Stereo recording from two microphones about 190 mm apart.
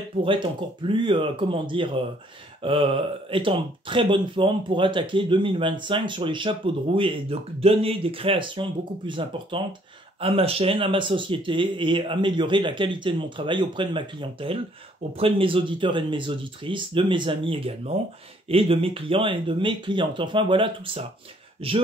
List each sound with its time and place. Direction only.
0.2 s speech: 25° right (ahead or behind)